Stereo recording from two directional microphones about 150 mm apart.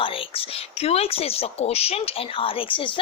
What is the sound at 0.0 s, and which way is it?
A woman's voice, 35° left (ahead or behind).